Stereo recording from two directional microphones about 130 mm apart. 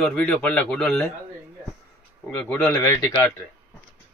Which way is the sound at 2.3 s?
10° left (ahead or behind).